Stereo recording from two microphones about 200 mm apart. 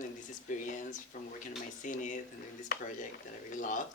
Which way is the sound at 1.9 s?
40° left (ahead or behind).